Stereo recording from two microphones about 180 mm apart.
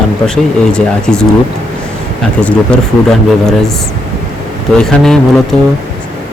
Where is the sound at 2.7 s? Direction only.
5° left (ahead or behind).